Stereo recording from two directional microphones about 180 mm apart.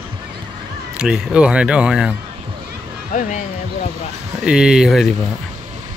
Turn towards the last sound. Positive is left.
turn(degrees=0)  # may be behind; listen again after turning